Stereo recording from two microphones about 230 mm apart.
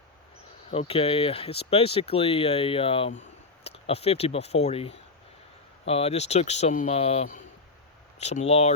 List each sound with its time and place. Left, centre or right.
0.7 s speech: left